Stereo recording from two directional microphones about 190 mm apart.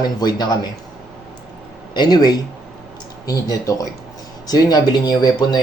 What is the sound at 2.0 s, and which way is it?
Speech, 20° left (ahead or behind).